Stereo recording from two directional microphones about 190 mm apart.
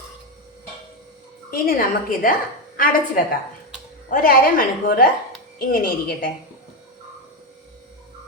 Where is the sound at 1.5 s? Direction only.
50° left (ahead or behind).